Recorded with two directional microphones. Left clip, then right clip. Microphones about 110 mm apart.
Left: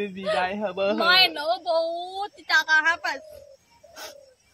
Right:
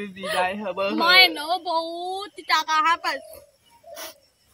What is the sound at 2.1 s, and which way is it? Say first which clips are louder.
Speech: right 1 dB; 25° left (ahead or behind).